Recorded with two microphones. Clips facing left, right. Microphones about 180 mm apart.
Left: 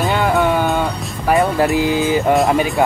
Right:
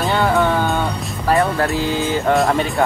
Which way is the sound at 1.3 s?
15° left (ahead or behind).